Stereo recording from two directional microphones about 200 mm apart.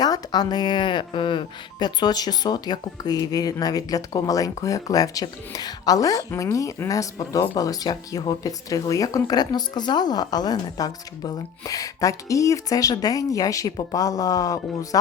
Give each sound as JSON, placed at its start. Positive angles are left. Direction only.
{"t": 0.0, "sound": "speech", "side_deg": 20}